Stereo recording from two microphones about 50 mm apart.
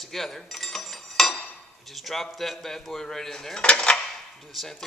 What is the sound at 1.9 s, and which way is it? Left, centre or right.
Speech, centre.